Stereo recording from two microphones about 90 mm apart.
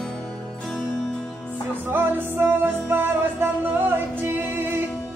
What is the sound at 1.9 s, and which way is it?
Music, 25° right (ahead or behind).